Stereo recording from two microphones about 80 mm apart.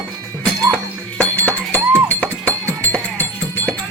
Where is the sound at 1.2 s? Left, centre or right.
Left.